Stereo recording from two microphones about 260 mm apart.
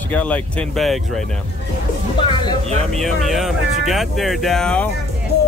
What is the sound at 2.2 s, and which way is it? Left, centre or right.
Speech, centre.